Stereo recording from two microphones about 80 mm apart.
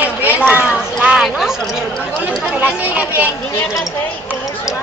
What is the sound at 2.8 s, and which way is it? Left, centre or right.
Speech, right.